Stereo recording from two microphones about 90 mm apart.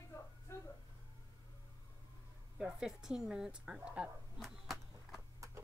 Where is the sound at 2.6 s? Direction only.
5° right (ahead or behind).